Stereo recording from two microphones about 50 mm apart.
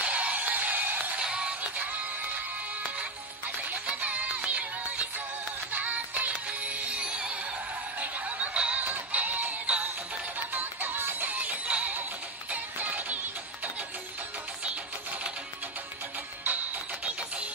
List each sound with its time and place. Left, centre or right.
0.0 s music: right
1.2 s music: right
3.4 s music: right
8.8 s music: right